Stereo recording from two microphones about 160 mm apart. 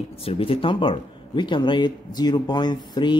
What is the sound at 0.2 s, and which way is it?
Speech, 35° left (ahead or behind).